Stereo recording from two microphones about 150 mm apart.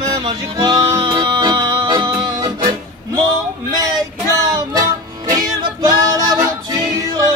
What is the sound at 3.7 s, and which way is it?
Music, 25° right (ahead or behind).